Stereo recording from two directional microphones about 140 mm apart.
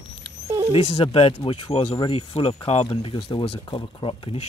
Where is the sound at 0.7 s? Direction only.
40° left (ahead or behind).